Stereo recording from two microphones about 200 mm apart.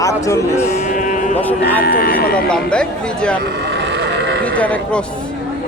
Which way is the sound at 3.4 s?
55° right (ahead or behind).